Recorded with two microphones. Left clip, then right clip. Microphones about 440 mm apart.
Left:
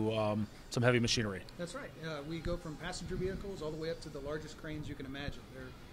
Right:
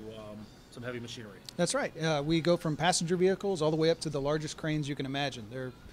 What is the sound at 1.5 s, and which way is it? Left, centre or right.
Speech, right.